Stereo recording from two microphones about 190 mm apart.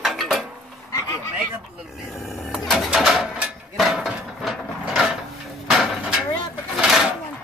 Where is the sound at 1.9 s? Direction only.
Centre (ahead or behind).